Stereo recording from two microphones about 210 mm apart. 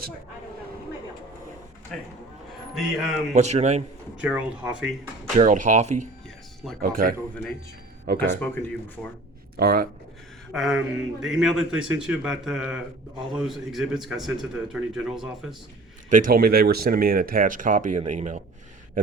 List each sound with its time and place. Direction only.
2.7 s a man's voice: centre (ahead or behind)
3.3 s speech: 30° right (ahead or behind)
4.2 s a man's voice: 5° right (ahead or behind)
5.4 s speech: 40° right (ahead or behind)
8.4 s speech: 10° left (ahead or behind)
9.6 s speech: 45° right (ahead or behind)
10.5 s a man's voice: centre (ahead or behind)
16.0 s speech: 40° right (ahead or behind)